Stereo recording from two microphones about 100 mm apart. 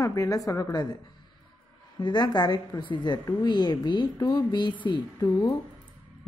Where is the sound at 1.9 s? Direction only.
45° left (ahead or behind).